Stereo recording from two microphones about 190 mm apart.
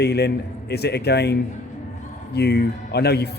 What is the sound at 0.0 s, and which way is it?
A man's voice, 60° left (ahead or behind).